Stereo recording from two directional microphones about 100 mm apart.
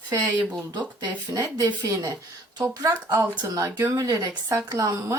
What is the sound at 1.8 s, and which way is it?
Speech, 30° right (ahead or behind).